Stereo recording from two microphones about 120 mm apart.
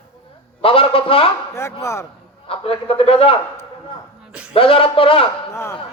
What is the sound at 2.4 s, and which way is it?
Speech, 50° left (ahead or behind).